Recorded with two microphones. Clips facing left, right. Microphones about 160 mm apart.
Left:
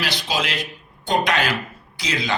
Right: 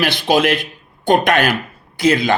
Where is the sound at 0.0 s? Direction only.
55° right (ahead or behind).